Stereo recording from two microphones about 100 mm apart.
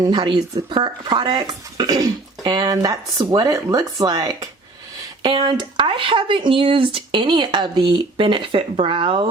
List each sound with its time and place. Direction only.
0.0 s speech: 45° right (ahead or behind)
5.2 s speech: 50° right (ahead or behind)